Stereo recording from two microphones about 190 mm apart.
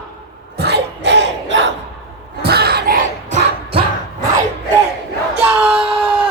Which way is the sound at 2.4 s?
55° right (ahead or behind).